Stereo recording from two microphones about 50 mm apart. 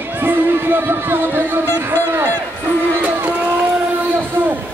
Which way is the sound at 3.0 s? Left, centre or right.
Right.